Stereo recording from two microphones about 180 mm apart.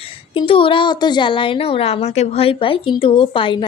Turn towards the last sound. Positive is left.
turn(degrees=30)  # may be behind; listen again after turning